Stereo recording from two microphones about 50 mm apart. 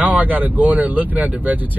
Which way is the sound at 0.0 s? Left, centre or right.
Right.